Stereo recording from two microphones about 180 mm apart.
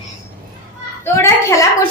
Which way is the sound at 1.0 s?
15° left (ahead or behind).